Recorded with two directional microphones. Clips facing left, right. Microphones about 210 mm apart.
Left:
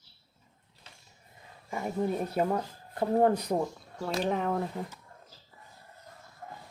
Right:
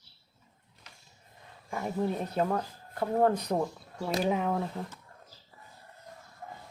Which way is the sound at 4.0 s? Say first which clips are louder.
Right 1 dB; 5° right (ahead or behind).